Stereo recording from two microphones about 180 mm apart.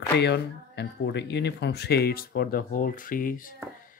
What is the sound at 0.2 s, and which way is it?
Speech, 70° left (ahead or behind).